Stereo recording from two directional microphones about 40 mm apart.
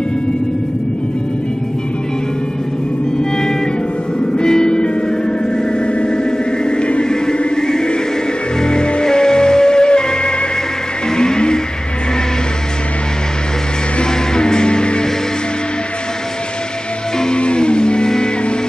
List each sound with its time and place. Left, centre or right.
4.2 s music: centre
5.7 s a sound: left
8.5 s music: left
13.9 s music: centre
17.2 s music: left